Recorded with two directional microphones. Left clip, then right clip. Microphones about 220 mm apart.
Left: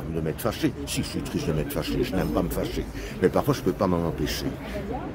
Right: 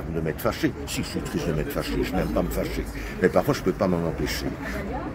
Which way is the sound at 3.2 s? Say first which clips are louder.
Right 1 dB; 15° left (ahead or behind).